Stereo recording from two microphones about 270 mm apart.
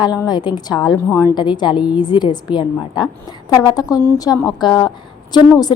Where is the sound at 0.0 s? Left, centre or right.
Centre.